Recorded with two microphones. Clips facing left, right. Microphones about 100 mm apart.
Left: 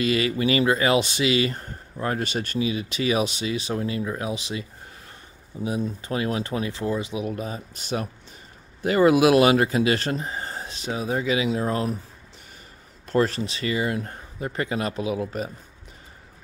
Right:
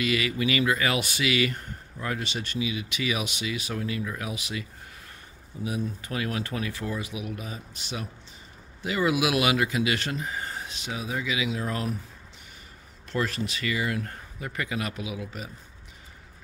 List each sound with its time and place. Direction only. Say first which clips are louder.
0.0 s speech: left 4 dB; 35° left (ahead or behind)
13.1 s speech: left 7 dB; 35° left (ahead or behind)